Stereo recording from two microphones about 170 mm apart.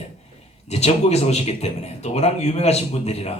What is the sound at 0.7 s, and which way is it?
A man's voice, 40° left (ahead or behind).